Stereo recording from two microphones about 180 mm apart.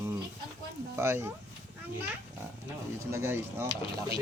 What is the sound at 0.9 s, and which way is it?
Speech, 15° right (ahead or behind).